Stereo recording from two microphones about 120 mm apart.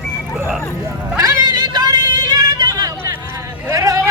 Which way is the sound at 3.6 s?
30° right (ahead or behind).